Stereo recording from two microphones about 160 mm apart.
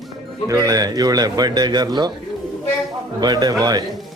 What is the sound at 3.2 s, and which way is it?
Speech, 25° right (ahead or behind).